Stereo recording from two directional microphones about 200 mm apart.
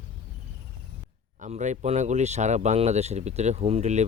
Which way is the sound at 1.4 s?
35° right (ahead or behind).